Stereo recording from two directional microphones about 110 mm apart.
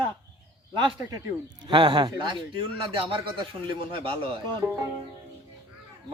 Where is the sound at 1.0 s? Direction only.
30° right (ahead or behind); by 4.3 s 50° right (ahead or behind).